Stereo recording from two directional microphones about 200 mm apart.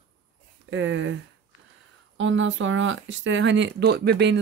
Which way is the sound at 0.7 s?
75° right (ahead or behind).